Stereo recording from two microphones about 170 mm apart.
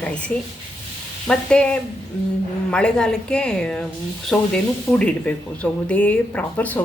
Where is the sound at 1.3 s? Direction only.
5° left (ahead or behind).